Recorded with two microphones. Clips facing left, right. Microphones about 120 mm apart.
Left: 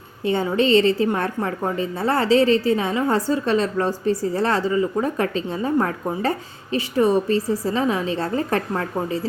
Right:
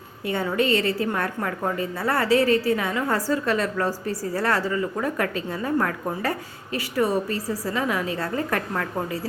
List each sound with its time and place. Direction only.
0.3 s a woman's voice: 25° left (ahead or behind)